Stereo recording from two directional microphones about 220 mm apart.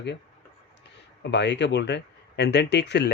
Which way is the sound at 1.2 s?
50° left (ahead or behind).